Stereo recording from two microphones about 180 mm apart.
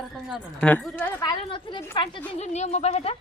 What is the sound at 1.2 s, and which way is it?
Speech, 25° left (ahead or behind).